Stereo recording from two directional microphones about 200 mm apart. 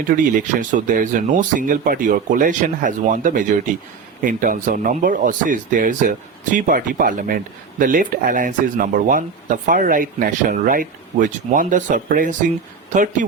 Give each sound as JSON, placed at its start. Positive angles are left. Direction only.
{"t": 0.1, "sound": "speech", "side_deg": -40}